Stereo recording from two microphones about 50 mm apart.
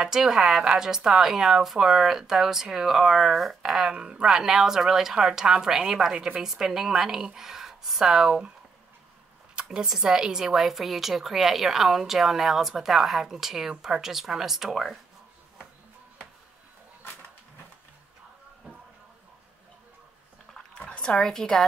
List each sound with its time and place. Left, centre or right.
0.0 s a woman's voice: centre
3.9 s a woman's voice: centre
9.6 s a sound: centre
9.8 s a woman's voice: centre
20.8 s a woman's voice: centre